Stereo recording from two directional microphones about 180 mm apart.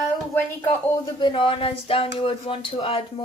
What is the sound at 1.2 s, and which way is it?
Speech, 30° left (ahead or behind).